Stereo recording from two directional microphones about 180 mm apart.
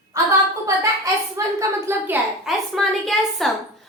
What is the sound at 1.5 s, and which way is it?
Speech, 15° right (ahead or behind).